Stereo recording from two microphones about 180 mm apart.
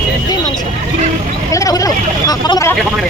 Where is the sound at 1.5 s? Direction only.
20° left (ahead or behind).